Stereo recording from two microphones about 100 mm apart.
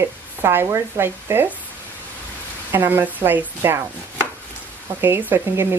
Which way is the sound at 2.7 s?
20° right (ahead or behind).